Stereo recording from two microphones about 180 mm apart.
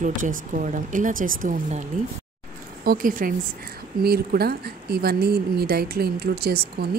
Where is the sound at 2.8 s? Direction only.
50° right (ahead or behind).